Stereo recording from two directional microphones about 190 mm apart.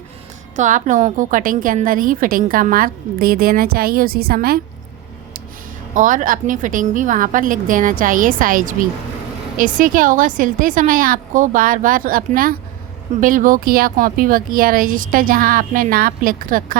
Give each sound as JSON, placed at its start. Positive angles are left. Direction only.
{"t": 0.5, "sound": "a woman's voice", "side_deg": -40}
{"t": 5.9, "sound": "a woman's voice", "side_deg": -45}